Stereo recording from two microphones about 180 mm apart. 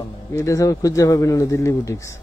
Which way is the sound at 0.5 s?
20° left (ahead or behind).